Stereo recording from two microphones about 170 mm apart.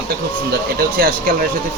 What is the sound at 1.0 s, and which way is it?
Speech, 60° right (ahead or behind).